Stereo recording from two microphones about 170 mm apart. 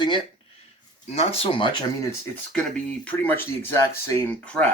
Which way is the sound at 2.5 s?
10° left (ahead or behind).